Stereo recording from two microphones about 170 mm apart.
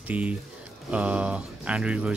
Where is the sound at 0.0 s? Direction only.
10° right (ahead or behind).